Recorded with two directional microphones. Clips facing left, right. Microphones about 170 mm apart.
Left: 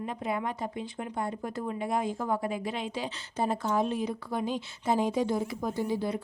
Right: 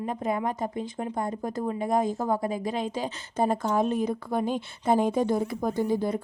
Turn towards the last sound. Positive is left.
turn(degrees=-50)  # may be behind; listen again after turning